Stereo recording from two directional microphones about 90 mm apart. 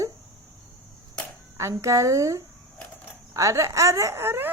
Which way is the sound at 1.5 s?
35° right (ahead or behind).